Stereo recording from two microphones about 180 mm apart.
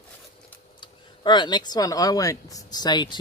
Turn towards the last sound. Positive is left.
turn(degrees=25)  # may be behind; listen again after turning